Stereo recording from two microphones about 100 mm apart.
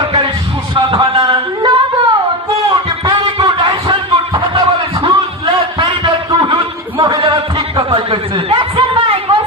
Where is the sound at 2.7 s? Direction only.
45° right (ahead or behind).